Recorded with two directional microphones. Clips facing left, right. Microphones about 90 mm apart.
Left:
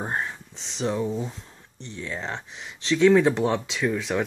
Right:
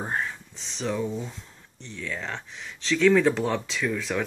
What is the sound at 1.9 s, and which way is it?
Speech, 30° left (ahead or behind).